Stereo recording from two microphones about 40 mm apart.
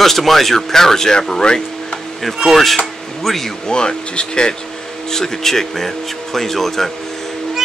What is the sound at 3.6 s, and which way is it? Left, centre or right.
Speech, left.